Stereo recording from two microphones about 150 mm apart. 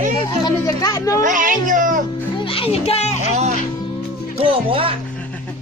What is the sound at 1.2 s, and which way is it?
Speech, 60° right (ahead or behind).